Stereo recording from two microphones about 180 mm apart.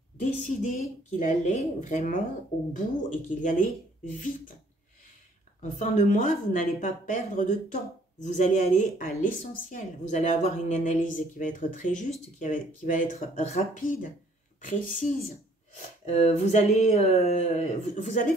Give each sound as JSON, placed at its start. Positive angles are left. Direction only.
{"t": 0.2, "sound": "speech", "side_deg": 45}
{"t": 5.6, "sound": "speech", "side_deg": 40}